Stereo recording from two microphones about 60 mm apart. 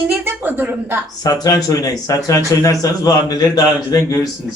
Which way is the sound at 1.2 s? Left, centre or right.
Left.